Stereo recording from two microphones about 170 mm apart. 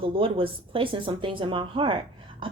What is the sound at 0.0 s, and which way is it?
Speech, 30° right (ahead or behind).